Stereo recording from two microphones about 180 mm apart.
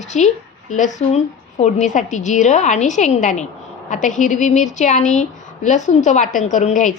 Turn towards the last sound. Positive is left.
turn(degrees=45)  # may be behind; listen again after turning